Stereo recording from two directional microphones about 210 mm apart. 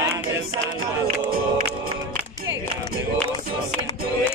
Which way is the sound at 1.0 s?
45° right (ahead or behind).